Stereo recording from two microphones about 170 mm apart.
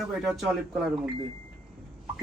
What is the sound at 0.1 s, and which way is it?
Speech, 5° right (ahead or behind).